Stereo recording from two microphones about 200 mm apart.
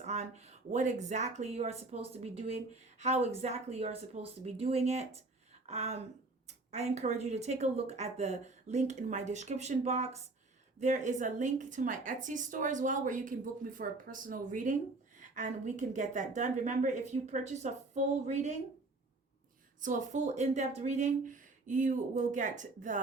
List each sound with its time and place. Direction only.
0.0 s a woman's voice: 35° right (ahead or behind)
19.8 s a woman's voice: 40° right (ahead or behind)